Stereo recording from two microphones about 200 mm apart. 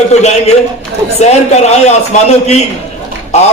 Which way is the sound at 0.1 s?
35° left (ahead or behind).